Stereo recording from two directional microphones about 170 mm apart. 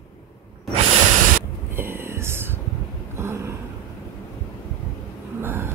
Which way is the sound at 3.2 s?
15° right (ahead or behind).